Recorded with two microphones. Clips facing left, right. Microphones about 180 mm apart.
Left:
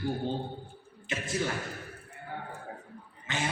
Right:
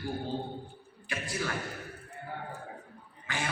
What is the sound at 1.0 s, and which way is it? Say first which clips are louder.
Speech: left 3 dB; 20° left (ahead or behind).